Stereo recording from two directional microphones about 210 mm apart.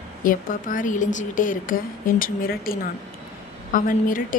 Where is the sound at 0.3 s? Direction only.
40° left (ahead or behind).